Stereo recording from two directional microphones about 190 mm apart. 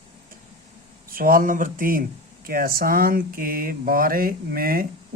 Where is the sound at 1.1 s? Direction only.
50° right (ahead or behind).